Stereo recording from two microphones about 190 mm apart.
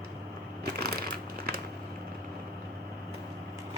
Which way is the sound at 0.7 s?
55° right (ahead or behind).